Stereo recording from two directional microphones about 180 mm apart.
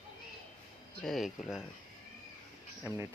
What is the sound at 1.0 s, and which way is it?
Speech, centre (ahead or behind).